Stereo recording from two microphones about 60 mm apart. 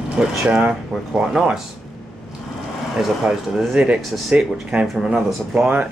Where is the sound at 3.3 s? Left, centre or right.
Right.